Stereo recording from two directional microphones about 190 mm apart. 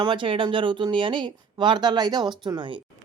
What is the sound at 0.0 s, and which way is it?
Speech, 25° right (ahead or behind).